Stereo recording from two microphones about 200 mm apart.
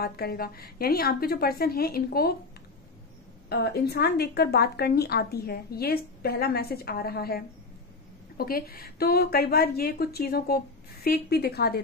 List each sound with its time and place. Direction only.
0.0 s a woman's voice: 50° left (ahead or behind)
3.4 s a woman's voice: 55° left (ahead or behind)